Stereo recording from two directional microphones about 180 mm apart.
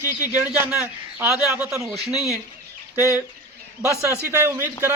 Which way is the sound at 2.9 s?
15° right (ahead or behind).